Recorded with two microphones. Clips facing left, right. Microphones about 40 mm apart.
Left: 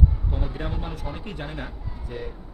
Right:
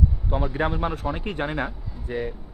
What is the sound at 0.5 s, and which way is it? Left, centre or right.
A man's voice, right.